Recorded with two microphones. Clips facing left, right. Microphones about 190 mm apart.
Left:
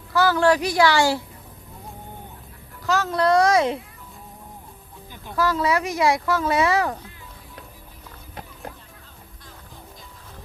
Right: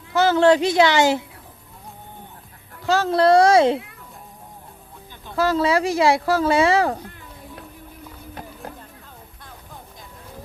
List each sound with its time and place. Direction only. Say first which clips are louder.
0.1 s speech: right 3 dB; 20° right (ahead or behind)
2.8 s speech: right 4 dB; 30° right (ahead or behind)
5.4 s speech: right 3 dB; 30° right (ahead or behind)